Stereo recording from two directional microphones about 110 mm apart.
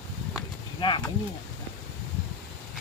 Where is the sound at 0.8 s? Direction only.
45° left (ahead or behind).